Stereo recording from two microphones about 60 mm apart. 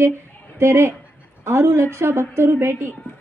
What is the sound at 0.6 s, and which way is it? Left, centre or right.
A woman's voice, right.